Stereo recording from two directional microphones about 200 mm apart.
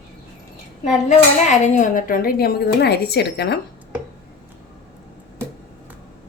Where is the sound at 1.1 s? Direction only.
35° left (ahead or behind); by 3.5 s 55° left (ahead or behind).